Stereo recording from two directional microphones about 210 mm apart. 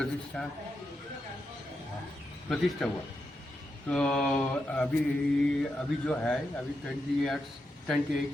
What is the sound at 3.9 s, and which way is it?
Speech, 5° left (ahead or behind).